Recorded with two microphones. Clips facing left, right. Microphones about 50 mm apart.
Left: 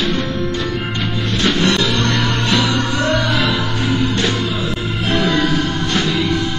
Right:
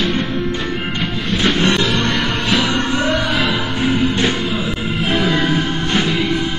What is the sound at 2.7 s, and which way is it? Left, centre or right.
Music, right.